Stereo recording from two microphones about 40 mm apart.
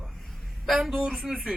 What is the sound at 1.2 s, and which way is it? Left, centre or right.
Speech, centre.